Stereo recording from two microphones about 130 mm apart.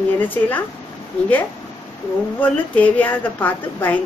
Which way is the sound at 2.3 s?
10° left (ahead or behind).